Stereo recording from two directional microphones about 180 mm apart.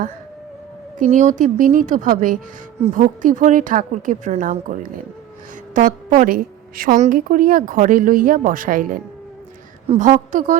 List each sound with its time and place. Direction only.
0.9 s a woman's voice: 45° right (ahead or behind)